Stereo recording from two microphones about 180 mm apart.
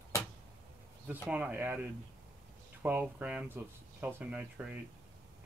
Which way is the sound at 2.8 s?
10° right (ahead or behind).